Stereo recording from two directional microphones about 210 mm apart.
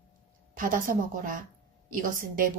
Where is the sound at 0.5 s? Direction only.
40° right (ahead or behind).